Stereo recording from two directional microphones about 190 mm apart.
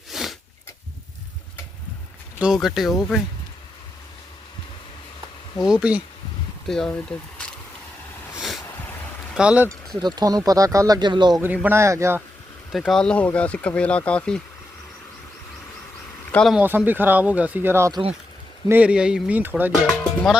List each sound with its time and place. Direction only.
0.1 s a sound: centre (ahead or behind)
2.4 s speech: centre (ahead or behind)
5.5 s speech: 5° right (ahead or behind)
8.4 s a sound: centre (ahead or behind)
9.3 s speech: 5° right (ahead or behind)
10.0 s speech: 20° right (ahead or behind)
11.3 s speech: 10° right (ahead or behind)
12.7 s speech: centre (ahead or behind)
16.3 s speech: centre (ahead or behind)
16.6 s speech: 10° right (ahead or behind)